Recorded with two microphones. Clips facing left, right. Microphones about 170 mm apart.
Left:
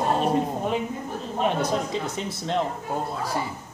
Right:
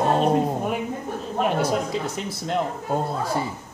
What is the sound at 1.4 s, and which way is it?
Speech, 5° right (ahead or behind).